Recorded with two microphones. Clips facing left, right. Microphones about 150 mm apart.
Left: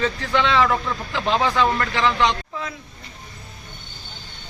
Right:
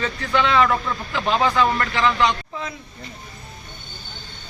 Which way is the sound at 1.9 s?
Centre (ahead or behind).